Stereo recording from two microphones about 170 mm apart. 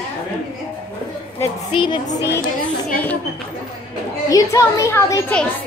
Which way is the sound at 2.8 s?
10° left (ahead or behind).